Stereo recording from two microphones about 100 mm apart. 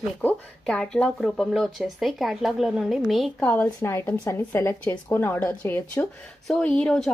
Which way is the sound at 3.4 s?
15° left (ahead or behind).